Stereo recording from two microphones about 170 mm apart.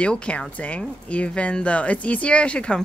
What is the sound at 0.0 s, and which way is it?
Speech, 5° left (ahead or behind).